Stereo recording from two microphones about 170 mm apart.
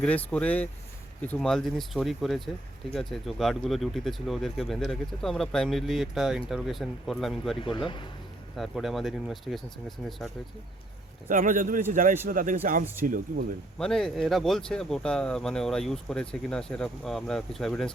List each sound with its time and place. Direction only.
0.0 s speech: 10° left (ahead or behind)
7.6 s speech: 30° left (ahead or behind)
8.5 s speech: centre (ahead or behind)
11.3 s speech: 50° right (ahead or behind)
12.8 s speech: 10° right (ahead or behind)
13.1 s speech: 50° right (ahead or behind)
13.7 s speech: 5° left (ahead or behind)